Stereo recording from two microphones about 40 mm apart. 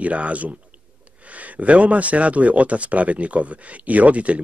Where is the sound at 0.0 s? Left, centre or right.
Right.